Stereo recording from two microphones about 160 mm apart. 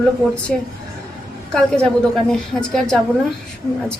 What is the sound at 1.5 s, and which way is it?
A woman's voice, 5° left (ahead or behind).